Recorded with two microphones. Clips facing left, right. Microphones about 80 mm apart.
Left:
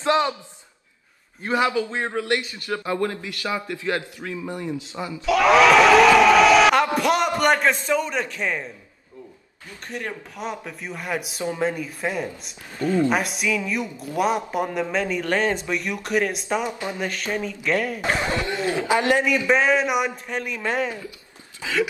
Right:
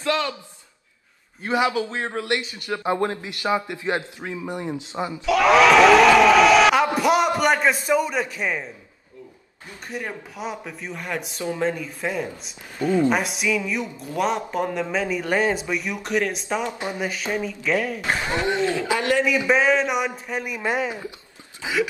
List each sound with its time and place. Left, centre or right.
0.0 s a sound: left
1.4 s a man's voice: centre
1.9 s a man's voice: centre
2.3 s a man's voice: right
5.2 s a man's voice: centre
9.8 s a man's voice: centre
16.7 s a man's voice: right
17.0 s a man's voice: centre
18.6 s a man's voice: left
19.2 s a man's voice: centre